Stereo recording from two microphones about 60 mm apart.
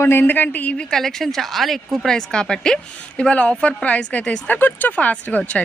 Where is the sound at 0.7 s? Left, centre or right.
Centre.